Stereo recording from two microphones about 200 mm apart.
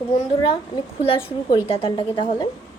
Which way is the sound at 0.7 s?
25° left (ahead or behind).